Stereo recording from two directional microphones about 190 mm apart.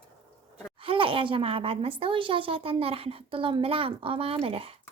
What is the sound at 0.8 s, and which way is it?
A child's voice, 30° right (ahead or behind).